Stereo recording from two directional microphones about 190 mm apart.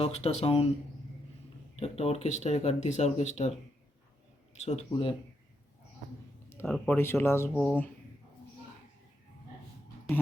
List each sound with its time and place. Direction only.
0.0 s speech: 35° left (ahead or behind)
1.7 s speech: 35° left (ahead or behind)
4.6 s speech: 35° left (ahead or behind)
6.7 s speech: 5° left (ahead or behind)